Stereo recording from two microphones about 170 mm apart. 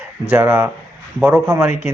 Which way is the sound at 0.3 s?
10° right (ahead or behind).